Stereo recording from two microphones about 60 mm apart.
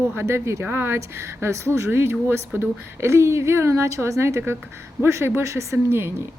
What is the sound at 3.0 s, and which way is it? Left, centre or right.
A woman's voice, right.